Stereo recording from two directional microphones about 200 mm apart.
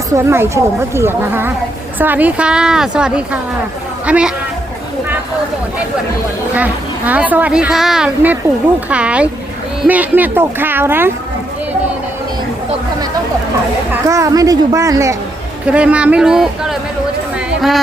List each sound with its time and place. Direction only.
0.1 s a woman's voice: 15° right (ahead or behind)
6.5 s a woman's voice: 10° right (ahead or behind)
13.9 s a woman's voice: 15° right (ahead or behind)